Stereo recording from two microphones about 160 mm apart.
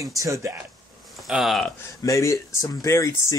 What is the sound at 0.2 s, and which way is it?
Speech, 20° right (ahead or behind).